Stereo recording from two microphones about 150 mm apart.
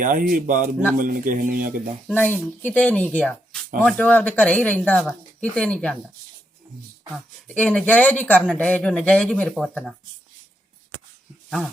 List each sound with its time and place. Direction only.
0.0 s a man's voice: 65° right (ahead or behind)
2.1 s speech: 15° left (ahead or behind)
7.4 s speech: 10° left (ahead or behind)
11.4 s a sound: centre (ahead or behind)